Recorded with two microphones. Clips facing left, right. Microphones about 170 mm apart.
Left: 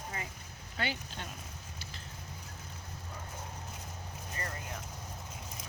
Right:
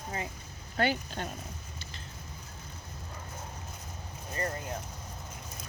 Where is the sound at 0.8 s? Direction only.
50° right (ahead or behind).